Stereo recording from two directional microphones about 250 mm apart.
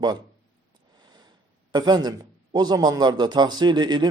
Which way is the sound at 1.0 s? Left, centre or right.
Centre.